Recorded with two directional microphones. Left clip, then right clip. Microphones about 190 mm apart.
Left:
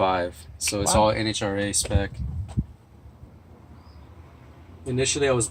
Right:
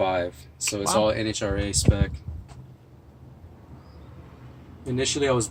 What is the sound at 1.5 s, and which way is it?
Speech, 35° left (ahead or behind).